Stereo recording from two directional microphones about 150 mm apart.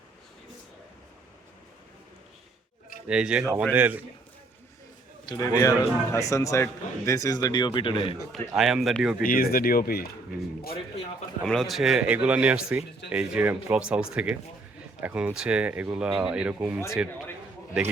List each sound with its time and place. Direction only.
3.1 s speech: 5° right (ahead or behind)
5.2 s a man's voice: 25° left (ahead or behind)
8.3 s speech: centre (ahead or behind)
9.2 s speech: 80° left
11.4 s speech: centre (ahead or behind)